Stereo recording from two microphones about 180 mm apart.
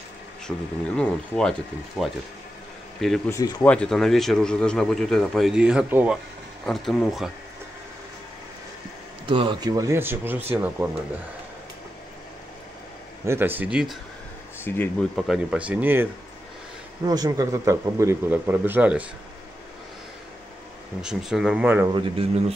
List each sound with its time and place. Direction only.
0.5 s a man's voice: 10° left (ahead or behind)
3.3 s speech: 15° left (ahead or behind)
3.7 s a man's voice: 5° left (ahead or behind)
9.2 s a man's voice: 25° right (ahead or behind); by 10.9 s 10° right (ahead or behind)
13.2 s a man's voice: 15° right (ahead or behind)
14.6 s speech: 10° left (ahead or behind)
15.1 s a man's voice: centre (ahead or behind)
21.0 s a man's voice: 5° right (ahead or behind)
21.8 s a man's voice: 30° right (ahead or behind)